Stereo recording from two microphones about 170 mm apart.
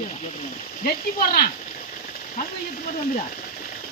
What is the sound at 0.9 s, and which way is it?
Speech, 65° left (ahead or behind).